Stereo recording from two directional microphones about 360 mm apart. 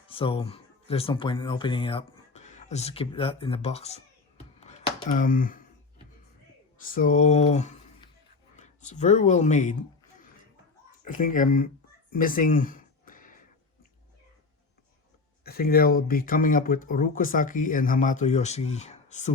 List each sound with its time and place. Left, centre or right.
0.1 s speech: centre
4.6 s a sound: centre
6.8 s speech: left
11.0 s speech: left
12.1 s a sound: left
15.4 s speech: left